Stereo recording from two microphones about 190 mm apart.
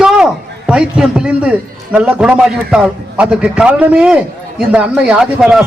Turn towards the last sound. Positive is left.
turn(degrees=-5)  # may be behind; listen again after turning